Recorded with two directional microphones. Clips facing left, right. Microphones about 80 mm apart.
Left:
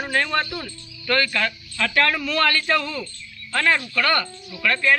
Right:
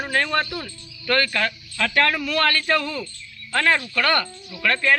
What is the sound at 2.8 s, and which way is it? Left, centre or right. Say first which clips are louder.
Speech: even; right.